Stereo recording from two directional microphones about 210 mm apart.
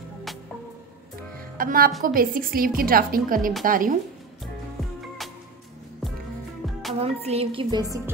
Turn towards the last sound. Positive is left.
turn(degrees=-25)  # may be behind; listen again after turning